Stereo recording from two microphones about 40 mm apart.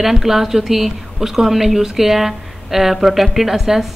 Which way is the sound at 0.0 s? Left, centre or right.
Centre.